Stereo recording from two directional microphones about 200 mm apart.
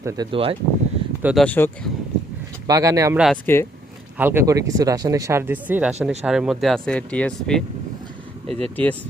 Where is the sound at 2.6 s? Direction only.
15° right (ahead or behind).